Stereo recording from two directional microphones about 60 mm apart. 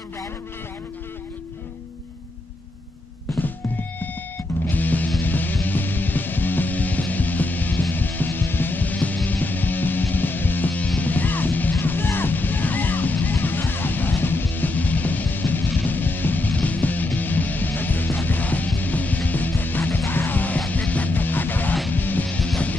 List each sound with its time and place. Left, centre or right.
4.6 s music: left